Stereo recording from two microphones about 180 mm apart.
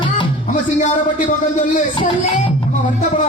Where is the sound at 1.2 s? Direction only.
45° left (ahead or behind).